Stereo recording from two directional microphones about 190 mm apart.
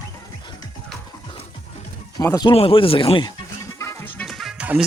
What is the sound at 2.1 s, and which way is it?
Speech, 20° left (ahead or behind).